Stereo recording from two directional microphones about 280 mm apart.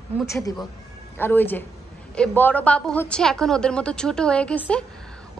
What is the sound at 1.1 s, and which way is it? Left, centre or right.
A woman's voice, centre.